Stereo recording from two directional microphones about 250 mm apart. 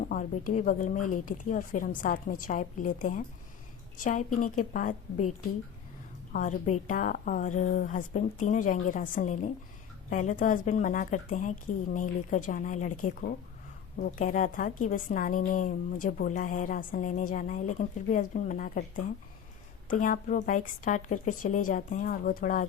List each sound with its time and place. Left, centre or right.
0.0 s a woman's voice: left
6.3 s a woman's voice: left